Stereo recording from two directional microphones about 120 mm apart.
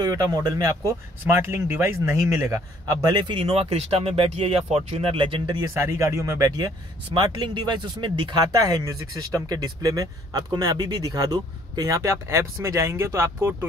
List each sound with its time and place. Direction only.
0.0 s speech: 30° right (ahead or behind)
5.6 s speech: 25° right (ahead or behind)
7.2 s speech: 40° right (ahead or behind); by 13.7 s 20° right (ahead or behind)